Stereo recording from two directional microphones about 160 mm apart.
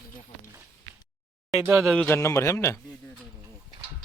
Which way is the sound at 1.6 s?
15° right (ahead or behind).